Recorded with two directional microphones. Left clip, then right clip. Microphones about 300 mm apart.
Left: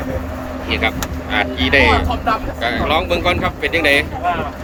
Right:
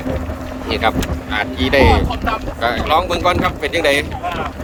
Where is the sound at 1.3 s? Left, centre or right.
Centre.